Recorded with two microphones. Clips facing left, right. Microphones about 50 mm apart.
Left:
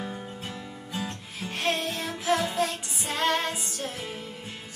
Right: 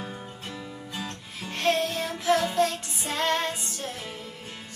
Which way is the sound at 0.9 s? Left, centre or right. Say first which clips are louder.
Left 3 dB; centre.